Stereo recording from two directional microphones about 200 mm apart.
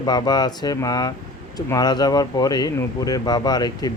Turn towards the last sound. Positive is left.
turn(degrees=20)  # may be behind; listen again after turning